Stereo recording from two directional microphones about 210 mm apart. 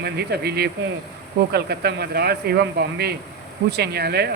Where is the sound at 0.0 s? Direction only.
50° right (ahead or behind).